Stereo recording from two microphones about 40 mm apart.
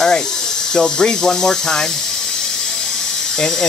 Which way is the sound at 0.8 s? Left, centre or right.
Centre.